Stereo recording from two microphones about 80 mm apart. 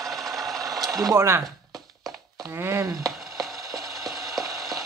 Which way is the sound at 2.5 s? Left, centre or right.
Right.